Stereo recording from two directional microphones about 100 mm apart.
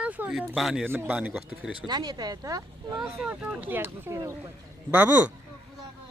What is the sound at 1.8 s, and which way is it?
Speech, 45° right (ahead or behind).